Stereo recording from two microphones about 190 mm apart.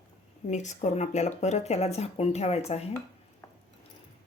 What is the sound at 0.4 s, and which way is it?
Speech, 40° left (ahead or behind).